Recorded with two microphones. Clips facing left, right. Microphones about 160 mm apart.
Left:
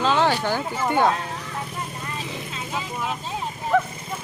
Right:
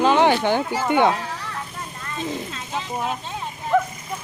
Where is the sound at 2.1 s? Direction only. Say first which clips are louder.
Right 8 dB; 5° left (ahead or behind).